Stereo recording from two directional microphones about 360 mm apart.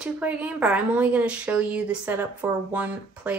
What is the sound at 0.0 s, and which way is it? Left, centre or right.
A woman's voice, centre.